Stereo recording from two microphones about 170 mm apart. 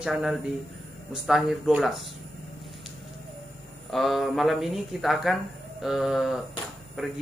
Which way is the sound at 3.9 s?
Centre (ahead or behind).